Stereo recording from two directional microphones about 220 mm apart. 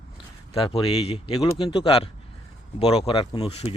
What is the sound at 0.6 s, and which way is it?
Speech, 25° left (ahead or behind).